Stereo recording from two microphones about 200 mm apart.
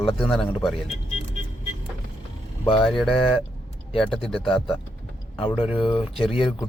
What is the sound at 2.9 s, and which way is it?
A man's voice, centre (ahead or behind).